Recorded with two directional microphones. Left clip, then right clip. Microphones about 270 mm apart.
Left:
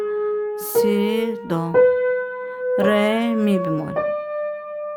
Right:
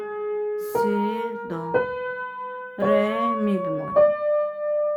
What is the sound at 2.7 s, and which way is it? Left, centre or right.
Speech, left.